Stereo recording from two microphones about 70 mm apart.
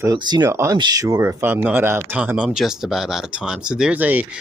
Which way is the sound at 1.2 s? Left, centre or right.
Right.